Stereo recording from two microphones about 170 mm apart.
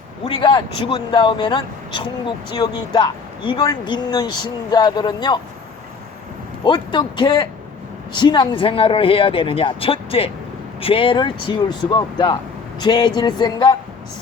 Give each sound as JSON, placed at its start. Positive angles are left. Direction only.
{"t": 0.3, "sound": "speech", "side_deg": 30}
{"t": 6.7, "sound": "speech", "side_deg": 25}